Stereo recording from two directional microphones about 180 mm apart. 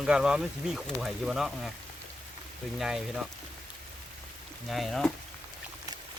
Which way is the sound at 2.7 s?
5° right (ahead or behind).